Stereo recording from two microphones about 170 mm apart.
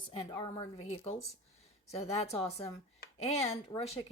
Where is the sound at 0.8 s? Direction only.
40° left (ahead or behind).